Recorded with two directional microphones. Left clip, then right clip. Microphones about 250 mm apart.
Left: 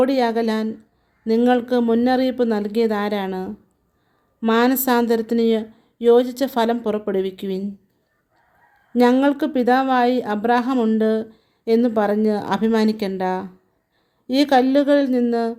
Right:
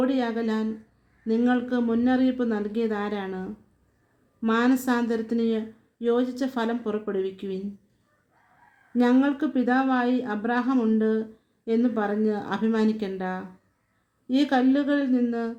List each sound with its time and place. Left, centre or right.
0.0 s speech: left
9.0 s speech: left